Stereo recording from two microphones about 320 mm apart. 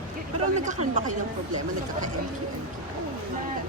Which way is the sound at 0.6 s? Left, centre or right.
Right.